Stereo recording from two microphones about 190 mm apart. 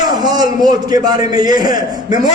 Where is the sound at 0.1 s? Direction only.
20° right (ahead or behind).